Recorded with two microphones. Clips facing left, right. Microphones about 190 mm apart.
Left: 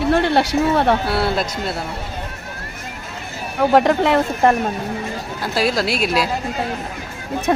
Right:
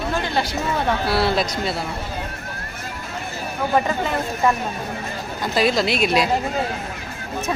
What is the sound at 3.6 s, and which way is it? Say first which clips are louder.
Speech: left 7 dB; 70° left (ahead or behind).